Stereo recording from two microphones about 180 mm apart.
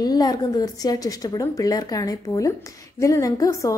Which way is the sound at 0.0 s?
20° left (ahead or behind).